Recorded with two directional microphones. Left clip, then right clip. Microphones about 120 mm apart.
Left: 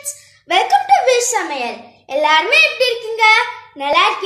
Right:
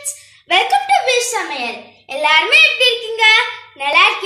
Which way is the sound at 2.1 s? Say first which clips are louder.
Right 1 dB; 35° left (ahead or behind).